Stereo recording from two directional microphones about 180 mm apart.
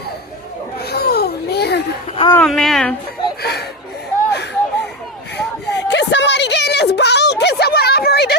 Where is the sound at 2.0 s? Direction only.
30° left (ahead or behind).